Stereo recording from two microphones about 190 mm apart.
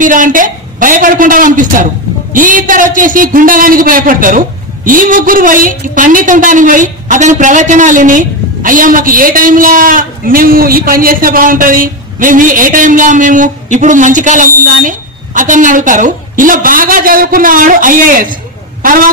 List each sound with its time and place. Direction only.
0.0 s a man's voice: 45° right (ahead or behind)